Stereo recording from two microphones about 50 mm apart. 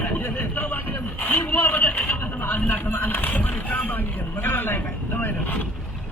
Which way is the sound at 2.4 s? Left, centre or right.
Left.